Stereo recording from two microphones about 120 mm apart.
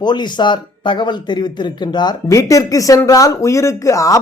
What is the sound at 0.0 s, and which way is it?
Speech, 35° left (ahead or behind).